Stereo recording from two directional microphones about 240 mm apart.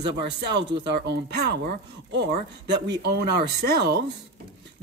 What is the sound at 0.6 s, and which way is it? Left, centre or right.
Speech, right.